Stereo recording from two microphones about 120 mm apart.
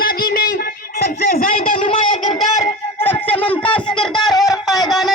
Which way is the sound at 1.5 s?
90° left.